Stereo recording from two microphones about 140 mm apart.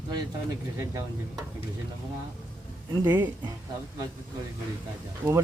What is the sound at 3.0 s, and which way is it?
Speech, 15° right (ahead or behind).